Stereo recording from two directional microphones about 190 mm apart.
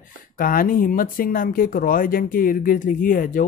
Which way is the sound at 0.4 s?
50° left (ahead or behind).